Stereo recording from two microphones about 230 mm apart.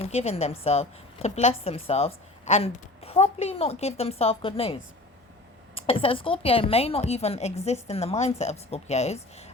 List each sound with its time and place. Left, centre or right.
0.0 s a woman's voice: left